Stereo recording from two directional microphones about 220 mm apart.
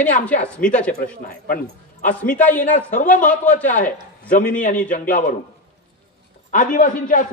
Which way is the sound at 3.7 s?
35° left (ahead or behind).